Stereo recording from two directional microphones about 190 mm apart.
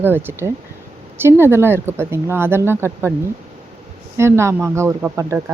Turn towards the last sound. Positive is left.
turn(degrees=-15)  # may be behind; listen again after turning